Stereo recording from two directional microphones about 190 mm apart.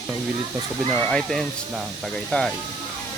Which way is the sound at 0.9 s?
5° left (ahead or behind).